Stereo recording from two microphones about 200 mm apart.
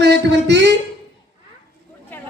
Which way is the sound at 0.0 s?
60° right (ahead or behind).